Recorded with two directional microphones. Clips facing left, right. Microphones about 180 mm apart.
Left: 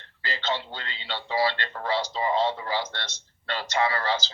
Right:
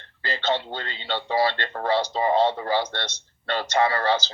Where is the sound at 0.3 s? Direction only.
50° right (ahead or behind).